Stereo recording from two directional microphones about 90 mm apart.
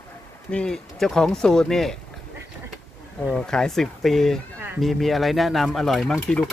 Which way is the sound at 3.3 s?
5° left (ahead or behind).